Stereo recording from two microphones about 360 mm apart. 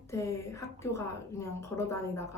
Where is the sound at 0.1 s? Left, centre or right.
Centre.